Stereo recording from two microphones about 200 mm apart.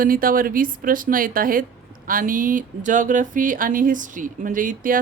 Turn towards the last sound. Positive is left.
turn(degrees=-40)  # may be behind; listen again after turning